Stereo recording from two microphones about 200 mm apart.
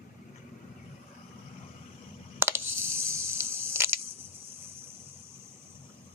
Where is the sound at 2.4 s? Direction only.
10° right (ahead or behind).